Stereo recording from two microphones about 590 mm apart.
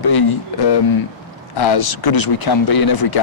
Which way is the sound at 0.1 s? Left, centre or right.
Left.